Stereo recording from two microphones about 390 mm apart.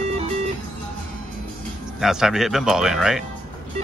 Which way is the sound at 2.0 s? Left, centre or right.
Centre.